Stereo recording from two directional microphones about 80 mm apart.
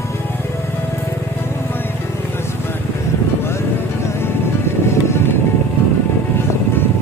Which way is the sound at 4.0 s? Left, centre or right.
Left.